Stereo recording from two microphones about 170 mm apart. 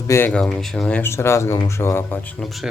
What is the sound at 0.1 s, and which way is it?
Speech, 10° left (ahead or behind).